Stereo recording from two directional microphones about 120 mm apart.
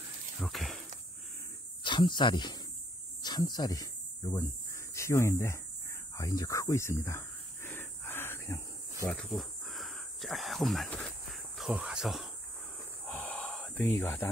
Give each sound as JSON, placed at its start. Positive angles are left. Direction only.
{"t": 0.4, "sound": "a sound", "side_deg": 0}
{"t": 1.8, "sound": "speech", "side_deg": 40}
{"t": 3.2, "sound": "a sound", "side_deg": 35}
{"t": 9.1, "sound": "cricket", "side_deg": 5}
{"t": 10.9, "sound": "cricket", "side_deg": 10}
{"t": 11.2, "sound": "cricket", "side_deg": 0}
{"t": 11.7, "sound": "speech", "side_deg": -5}
{"t": 13.3, "sound": "a sound", "side_deg": 5}
{"t": 13.7, "sound": "speech", "side_deg": 20}